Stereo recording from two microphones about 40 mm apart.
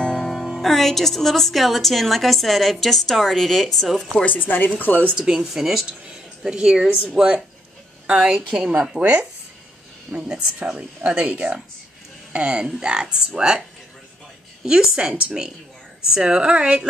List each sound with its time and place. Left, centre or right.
0.0 s music: left
0.6 s a woman's voice: centre
4.4 s speech: left
5.1 s speech: centre
5.5 s a woman's voice: centre
6.4 s a woman's voice: centre
8.9 s speech: right
12.8 s speech: centre